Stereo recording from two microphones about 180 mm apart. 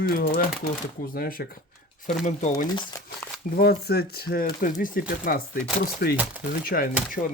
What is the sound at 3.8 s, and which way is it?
Speech, 65° left (ahead or behind).